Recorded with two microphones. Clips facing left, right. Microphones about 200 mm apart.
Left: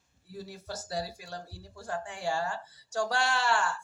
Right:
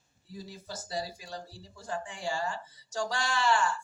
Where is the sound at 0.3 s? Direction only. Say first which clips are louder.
Left 2 dB; 70° left (ahead or behind).